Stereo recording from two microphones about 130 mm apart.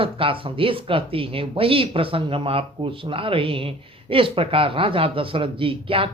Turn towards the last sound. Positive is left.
turn(degrees=-45)  # may be behind; listen again after turning